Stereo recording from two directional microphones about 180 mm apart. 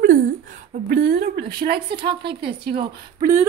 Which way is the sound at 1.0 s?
65° right (ahead or behind).